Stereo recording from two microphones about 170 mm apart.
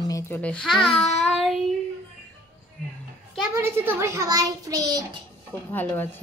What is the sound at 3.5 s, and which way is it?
A child's voice, 15° right (ahead or behind).